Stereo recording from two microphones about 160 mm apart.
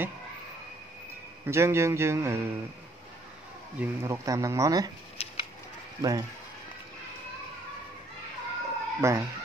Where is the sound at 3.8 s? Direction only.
15° right (ahead or behind).